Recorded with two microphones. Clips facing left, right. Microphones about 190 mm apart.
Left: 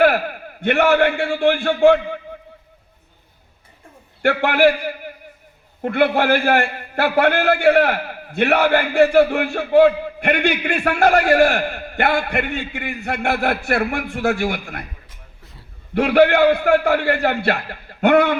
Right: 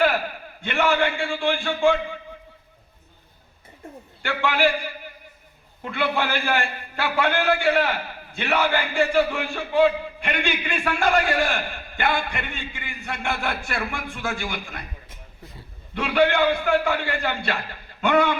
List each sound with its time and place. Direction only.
0.0 s a man's voice: 60° left (ahead or behind)
4.2 s a man's voice: 65° left (ahead or behind)
16.0 s a man's voice: 60° left (ahead or behind)